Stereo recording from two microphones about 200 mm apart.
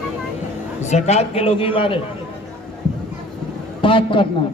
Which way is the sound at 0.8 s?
35° left (ahead or behind).